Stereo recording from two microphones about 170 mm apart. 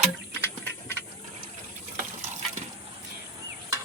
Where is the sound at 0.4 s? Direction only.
10° left (ahead or behind).